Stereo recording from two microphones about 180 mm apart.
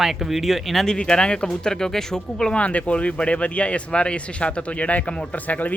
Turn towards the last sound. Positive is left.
turn(degrees=10)  # may be behind; listen again after turning